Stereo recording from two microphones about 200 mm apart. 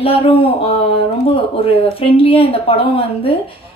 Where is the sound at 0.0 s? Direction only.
30° left (ahead or behind).